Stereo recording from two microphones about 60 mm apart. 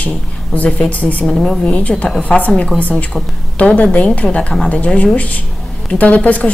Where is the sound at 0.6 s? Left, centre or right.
Left.